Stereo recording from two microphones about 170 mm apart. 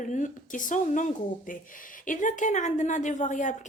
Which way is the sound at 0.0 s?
50° left (ahead or behind).